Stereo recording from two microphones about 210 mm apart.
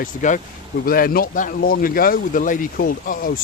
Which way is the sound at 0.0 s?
35° left (ahead or behind).